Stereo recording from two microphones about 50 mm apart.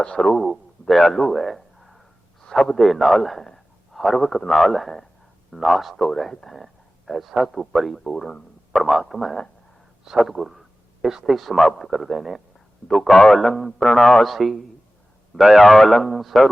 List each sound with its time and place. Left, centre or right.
0.0 s a man's voice: centre
0.3 s a sound: centre
2.6 s a man's voice: centre
8.7 s a man's voice: centre